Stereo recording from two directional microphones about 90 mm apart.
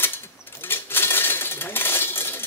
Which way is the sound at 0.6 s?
25° left (ahead or behind).